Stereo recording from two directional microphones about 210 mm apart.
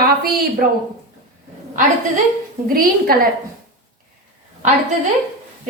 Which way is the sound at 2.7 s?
45° right (ahead or behind).